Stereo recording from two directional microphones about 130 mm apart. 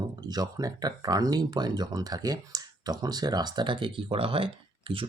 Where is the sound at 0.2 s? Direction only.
30° right (ahead or behind).